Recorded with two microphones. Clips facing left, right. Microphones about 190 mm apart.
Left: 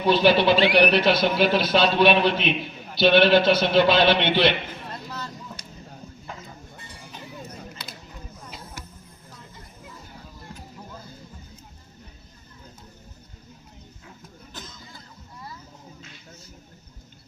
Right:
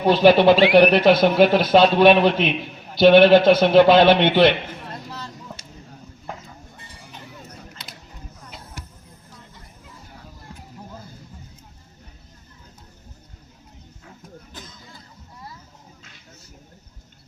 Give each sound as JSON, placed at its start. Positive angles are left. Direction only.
{"t": 0.0, "sound": "speech", "side_deg": -45}